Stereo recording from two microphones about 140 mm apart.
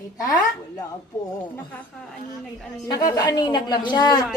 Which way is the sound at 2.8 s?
25° left (ahead or behind).